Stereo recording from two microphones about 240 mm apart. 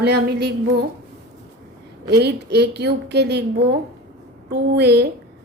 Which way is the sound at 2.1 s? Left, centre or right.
Right.